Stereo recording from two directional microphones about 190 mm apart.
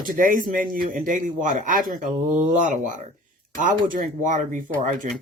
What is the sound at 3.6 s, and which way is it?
Speech, 40° right (ahead or behind).